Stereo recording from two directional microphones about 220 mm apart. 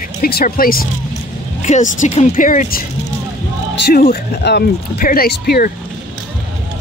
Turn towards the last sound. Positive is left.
turn(degrees=45)  # may be behind; listen again after turning